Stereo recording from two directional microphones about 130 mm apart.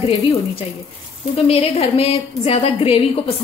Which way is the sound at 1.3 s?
50° left (ahead or behind).